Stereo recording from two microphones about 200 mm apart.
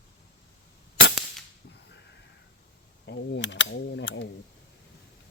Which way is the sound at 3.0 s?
65° left (ahead or behind).